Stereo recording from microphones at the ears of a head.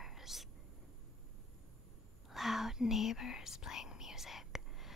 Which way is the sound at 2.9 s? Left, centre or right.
Left.